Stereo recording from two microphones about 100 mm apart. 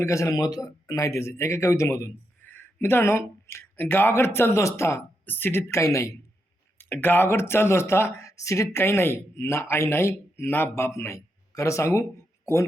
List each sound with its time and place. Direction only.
0.0 s speech: 30° left (ahead or behind)